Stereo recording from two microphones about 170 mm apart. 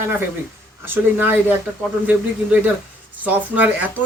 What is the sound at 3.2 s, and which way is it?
Speech, 10° right (ahead or behind).